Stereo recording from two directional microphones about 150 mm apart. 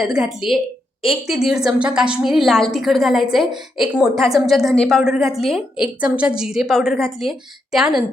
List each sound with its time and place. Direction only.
0.0 s a woman's voice: centre (ahead or behind)
1.5 s a woman's voice: 5° right (ahead or behind)